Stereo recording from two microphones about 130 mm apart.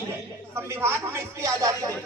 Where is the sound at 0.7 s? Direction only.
20° right (ahead or behind).